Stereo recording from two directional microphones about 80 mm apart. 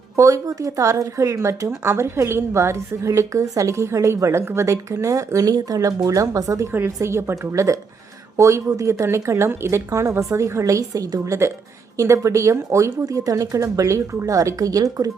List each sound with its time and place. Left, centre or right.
0.2 s speech: right
6.7 s speech: right